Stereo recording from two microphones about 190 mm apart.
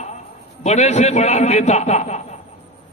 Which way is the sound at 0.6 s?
35° left (ahead or behind).